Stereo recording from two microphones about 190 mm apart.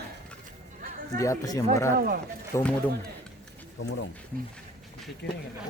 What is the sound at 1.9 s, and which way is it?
Speech, 55° right (ahead or behind).